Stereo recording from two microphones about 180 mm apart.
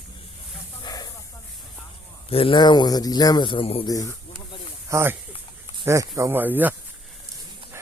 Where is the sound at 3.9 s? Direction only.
20° left (ahead or behind).